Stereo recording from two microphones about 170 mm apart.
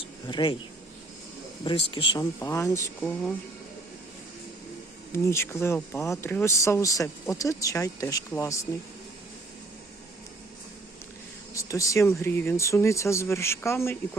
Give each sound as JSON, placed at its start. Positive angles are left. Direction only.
{"t": 0.0, "sound": "speech", "side_deg": 30}
{"t": 1.6, "sound": "speech", "side_deg": 30}
{"t": 5.1, "sound": "speech", "side_deg": 15}
{"t": 11.5, "sound": "speech", "side_deg": 20}